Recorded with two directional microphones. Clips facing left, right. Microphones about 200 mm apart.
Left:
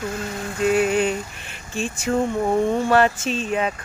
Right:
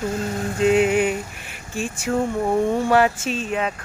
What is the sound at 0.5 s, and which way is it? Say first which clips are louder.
Vehicle: right 2 dB; 20° right (ahead or behind).